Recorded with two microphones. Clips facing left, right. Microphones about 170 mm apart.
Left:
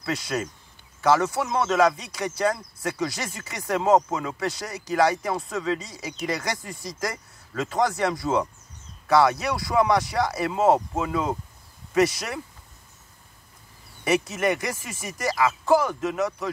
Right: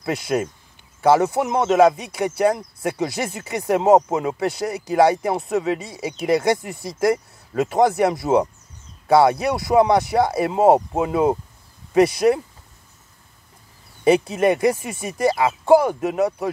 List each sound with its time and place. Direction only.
0.0 s speech: 25° right (ahead or behind)
14.0 s speech: 30° right (ahead or behind)